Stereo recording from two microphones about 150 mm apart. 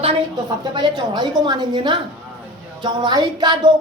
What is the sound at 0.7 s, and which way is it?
A man's voice, 30° right (ahead or behind).